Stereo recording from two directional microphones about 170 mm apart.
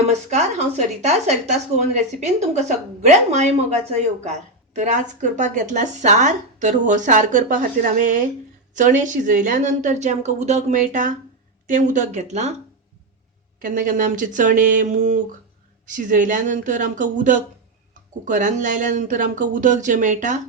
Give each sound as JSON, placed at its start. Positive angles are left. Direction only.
{"t": 0.1, "sound": "speech", "side_deg": -40}
{"t": 13.6, "sound": "speech", "side_deg": -50}